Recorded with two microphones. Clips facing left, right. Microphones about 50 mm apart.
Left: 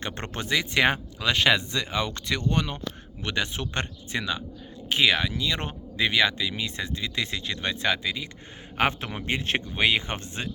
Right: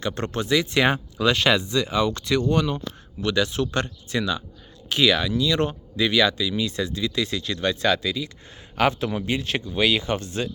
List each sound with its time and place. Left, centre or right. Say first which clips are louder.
0.0 s speech: right 6 dB; left